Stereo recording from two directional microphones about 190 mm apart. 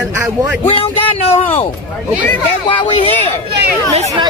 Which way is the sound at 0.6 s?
30° left (ahead or behind).